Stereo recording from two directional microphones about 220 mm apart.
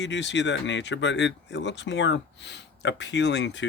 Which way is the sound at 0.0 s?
55° left (ahead or behind).